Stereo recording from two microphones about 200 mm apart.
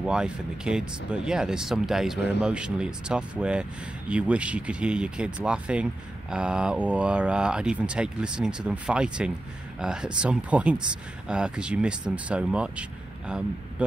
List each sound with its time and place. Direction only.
0.0 s speech: 5° right (ahead or behind)